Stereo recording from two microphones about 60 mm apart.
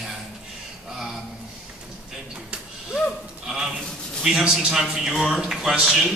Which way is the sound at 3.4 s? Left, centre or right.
Centre.